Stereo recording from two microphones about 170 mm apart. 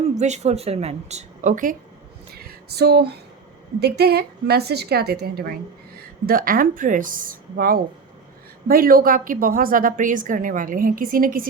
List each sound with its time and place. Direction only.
0.2 s a woman's voice: 40° right (ahead or behind)
2.3 s a sound: 65° right (ahead or behind)
3.8 s a woman's voice: 70° right (ahead or behind); by 11.4 s 55° right (ahead or behind)